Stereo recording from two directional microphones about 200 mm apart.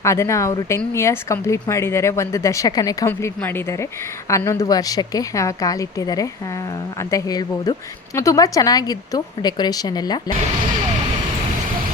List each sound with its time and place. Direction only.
0.0 s a woman's voice: 15° left (ahead or behind)